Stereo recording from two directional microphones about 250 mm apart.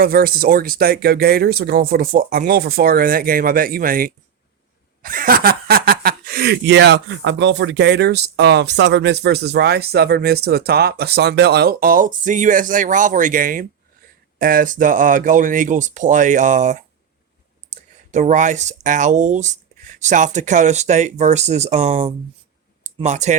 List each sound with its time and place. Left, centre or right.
0.0 s speech: right